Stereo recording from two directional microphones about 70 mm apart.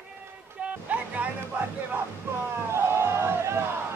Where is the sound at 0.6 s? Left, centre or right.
Right.